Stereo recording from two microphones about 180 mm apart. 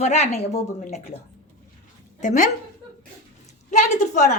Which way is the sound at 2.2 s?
45° left (ahead or behind).